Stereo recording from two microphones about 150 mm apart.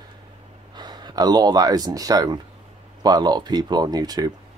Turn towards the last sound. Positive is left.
turn(degrees=-25)  # may be behind; listen again after turning